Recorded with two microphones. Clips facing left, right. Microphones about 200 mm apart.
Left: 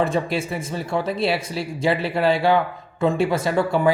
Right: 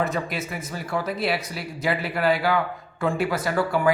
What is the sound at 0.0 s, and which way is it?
Speech, 30° left (ahead or behind).